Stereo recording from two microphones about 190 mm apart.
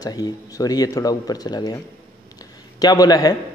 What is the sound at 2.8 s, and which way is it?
Speech, 20° left (ahead or behind).